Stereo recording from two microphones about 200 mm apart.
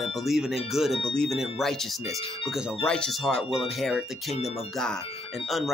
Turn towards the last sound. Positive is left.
turn(degrees=0)  # may be behind; listen again after turning